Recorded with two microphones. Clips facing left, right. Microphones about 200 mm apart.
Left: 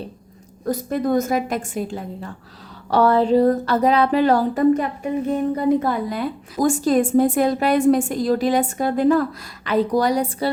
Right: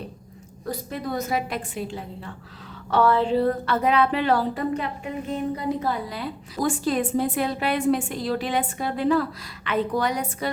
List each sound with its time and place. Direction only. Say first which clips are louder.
0.6 s a woman's voice: left 8 dB; 45° left (ahead or behind)